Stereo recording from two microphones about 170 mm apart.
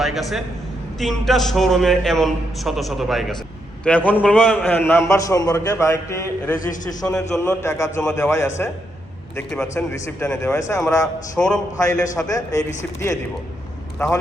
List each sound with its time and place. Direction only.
0.0 s a man's voice: centre (ahead or behind); by 11.1 s 20° left (ahead or behind)
11.3 s a man's voice: 5° left (ahead or behind)
12.3 s a man's voice: 20° left (ahead or behind)
14.0 s a man's voice: 20° left (ahead or behind)